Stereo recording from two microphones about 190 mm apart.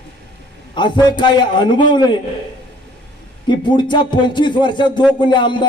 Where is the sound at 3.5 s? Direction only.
25° left (ahead or behind).